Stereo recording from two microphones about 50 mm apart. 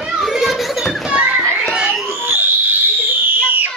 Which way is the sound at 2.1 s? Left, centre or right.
Right.